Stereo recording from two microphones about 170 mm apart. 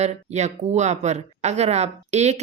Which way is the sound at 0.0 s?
40° right (ahead or behind).